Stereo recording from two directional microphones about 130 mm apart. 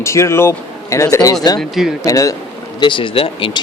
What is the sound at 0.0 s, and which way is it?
Speech, 20° left (ahead or behind).